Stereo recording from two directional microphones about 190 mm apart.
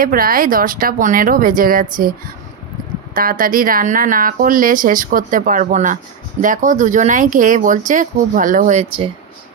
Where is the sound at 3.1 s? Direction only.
45° right (ahead or behind); by 9.1 s 30° right (ahead or behind).